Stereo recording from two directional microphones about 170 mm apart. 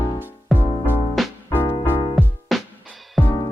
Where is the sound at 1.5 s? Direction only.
10° left (ahead or behind).